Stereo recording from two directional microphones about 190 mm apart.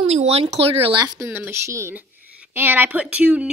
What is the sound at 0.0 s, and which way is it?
Speech, 35° right (ahead or behind).